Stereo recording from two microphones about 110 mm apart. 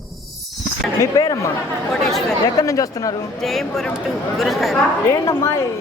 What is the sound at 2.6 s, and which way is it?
Speech, 30° left (ahead or behind).